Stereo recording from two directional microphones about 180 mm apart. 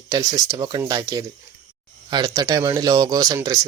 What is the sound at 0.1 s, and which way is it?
Speech, 20° right (ahead or behind).